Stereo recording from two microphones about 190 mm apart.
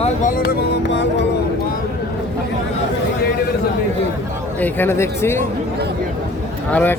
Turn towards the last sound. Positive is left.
turn(degrees=5)  # may be behind; listen again after turning